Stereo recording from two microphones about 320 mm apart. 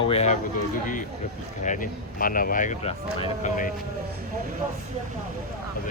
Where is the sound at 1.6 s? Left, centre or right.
Left.